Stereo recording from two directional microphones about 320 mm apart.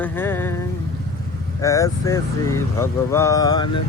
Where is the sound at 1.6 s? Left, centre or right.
Centre.